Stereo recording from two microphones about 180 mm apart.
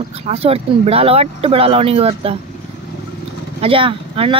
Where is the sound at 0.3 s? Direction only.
35° right (ahead or behind).